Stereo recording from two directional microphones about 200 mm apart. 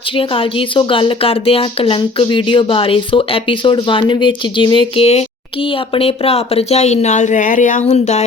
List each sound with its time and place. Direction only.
0.2 s a woman's voice: 25° left (ahead or behind)